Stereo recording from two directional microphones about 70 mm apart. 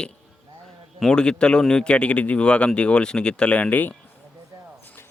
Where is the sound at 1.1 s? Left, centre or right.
Centre.